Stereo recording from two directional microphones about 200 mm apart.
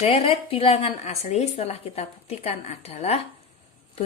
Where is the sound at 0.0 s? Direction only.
30° left (ahead or behind).